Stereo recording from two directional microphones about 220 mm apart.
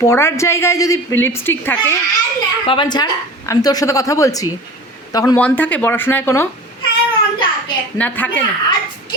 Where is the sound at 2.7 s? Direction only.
20° left (ahead or behind).